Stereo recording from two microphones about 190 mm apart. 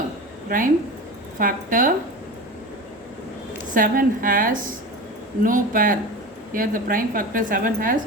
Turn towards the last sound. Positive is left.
turn(degrees=-45)  # may be behind; listen again after turning